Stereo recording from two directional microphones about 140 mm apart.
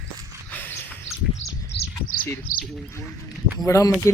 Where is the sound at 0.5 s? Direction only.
10° left (ahead or behind).